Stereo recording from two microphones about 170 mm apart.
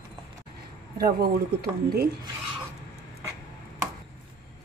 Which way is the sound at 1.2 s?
65° right (ahead or behind).